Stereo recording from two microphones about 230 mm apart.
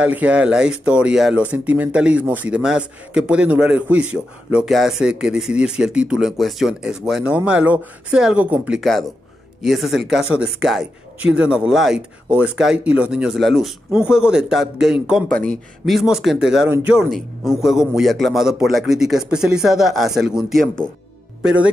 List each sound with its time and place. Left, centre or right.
0.0 s speech: centre